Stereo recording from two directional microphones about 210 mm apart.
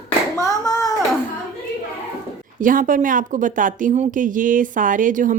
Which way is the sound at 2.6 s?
40° right (ahead or behind).